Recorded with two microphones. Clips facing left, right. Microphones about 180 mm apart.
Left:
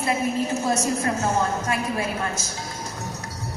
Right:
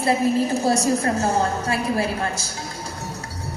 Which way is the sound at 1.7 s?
35° right (ahead or behind).